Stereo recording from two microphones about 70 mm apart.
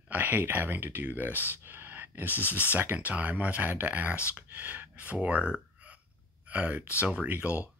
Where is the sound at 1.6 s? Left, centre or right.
Right.